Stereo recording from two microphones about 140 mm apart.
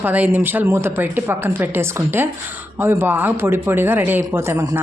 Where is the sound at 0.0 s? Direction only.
10° right (ahead or behind).